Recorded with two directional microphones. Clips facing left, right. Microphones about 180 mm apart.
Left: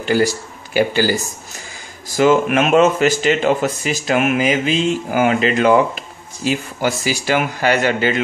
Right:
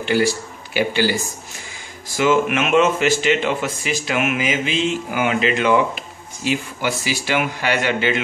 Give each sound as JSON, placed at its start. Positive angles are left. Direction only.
{"t": 0.0, "sound": "speech", "side_deg": 40}
{"t": 2.1, "sound": "speech", "side_deg": 40}